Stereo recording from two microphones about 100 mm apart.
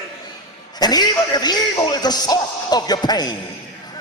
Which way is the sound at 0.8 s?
45° left (ahead or behind).